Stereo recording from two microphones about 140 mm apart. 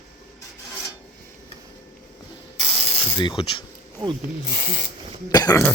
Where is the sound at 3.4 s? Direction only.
40° left (ahead or behind).